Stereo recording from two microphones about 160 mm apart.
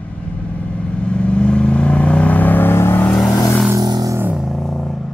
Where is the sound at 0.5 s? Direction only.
5° left (ahead or behind).